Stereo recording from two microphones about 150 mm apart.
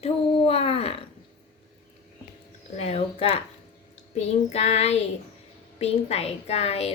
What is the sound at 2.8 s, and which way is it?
A woman's voice, 40° left (ahead or behind).